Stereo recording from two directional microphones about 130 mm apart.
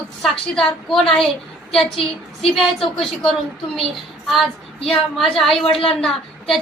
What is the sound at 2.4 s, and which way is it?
A woman's voice, centre (ahead or behind).